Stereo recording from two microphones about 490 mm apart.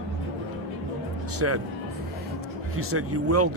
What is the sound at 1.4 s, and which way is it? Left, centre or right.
Speech, right.